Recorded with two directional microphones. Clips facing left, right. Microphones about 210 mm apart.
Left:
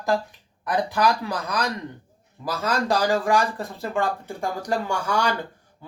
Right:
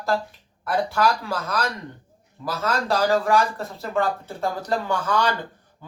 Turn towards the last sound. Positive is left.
turn(degrees=10)  # may be behind; listen again after turning